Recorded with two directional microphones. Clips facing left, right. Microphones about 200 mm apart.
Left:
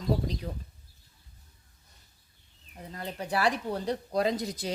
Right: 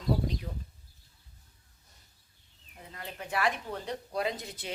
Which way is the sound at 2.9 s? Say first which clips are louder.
Left 4 dB; 35° left (ahead or behind).